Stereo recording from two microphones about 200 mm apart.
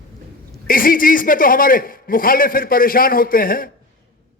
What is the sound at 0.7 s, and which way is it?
A man's voice, 45° left (ahead or behind).